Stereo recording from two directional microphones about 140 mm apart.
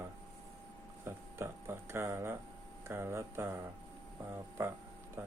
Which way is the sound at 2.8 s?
20° right (ahead or behind).